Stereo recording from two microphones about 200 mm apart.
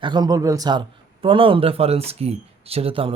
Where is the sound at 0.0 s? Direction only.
20° right (ahead or behind).